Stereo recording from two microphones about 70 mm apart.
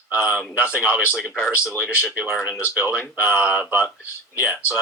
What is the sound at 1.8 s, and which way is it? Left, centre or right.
Speech, left.